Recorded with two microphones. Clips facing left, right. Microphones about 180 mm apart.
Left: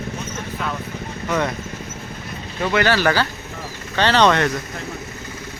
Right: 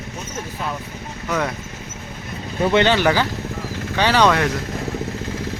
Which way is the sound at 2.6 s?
25° right (ahead or behind).